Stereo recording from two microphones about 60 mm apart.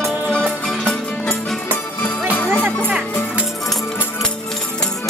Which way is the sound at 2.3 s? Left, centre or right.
Left.